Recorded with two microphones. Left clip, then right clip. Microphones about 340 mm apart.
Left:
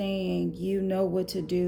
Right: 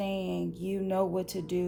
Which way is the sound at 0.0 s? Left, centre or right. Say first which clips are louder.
Left 3 dB; centre.